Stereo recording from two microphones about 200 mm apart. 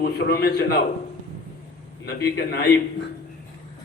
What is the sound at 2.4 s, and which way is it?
Speech, 55° left (ahead or behind).